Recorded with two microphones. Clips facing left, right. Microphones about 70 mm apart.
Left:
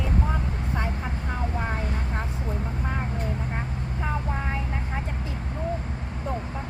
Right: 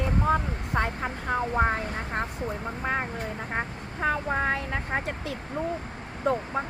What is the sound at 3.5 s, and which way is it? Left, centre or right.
Vehicle, right.